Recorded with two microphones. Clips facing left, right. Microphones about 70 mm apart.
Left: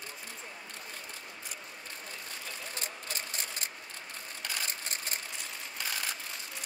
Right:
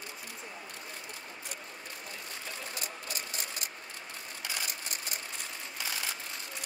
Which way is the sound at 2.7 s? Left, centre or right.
Left.